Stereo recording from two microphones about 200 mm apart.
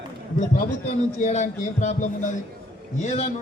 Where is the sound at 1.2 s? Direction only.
35° left (ahead or behind).